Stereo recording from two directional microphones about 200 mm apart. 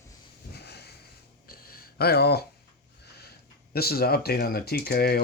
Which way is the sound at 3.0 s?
55° left (ahead or behind).